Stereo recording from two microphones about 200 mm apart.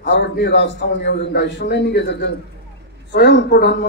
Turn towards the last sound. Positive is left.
turn(degrees=55)  # may be behind; listen again after turning